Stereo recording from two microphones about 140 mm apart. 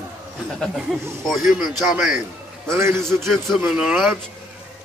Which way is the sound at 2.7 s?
20° right (ahead or behind).